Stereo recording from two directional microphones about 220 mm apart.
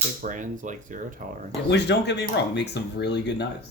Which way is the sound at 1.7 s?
50° left (ahead or behind).